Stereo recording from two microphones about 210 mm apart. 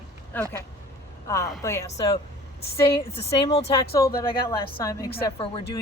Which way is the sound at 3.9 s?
15° left (ahead or behind).